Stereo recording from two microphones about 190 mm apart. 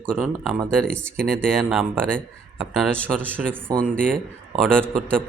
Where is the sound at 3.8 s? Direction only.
50° right (ahead or behind).